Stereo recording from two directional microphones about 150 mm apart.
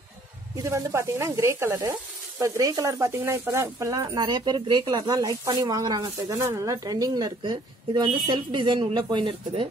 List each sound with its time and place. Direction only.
0.6 s sizzle: 20° right (ahead or behind)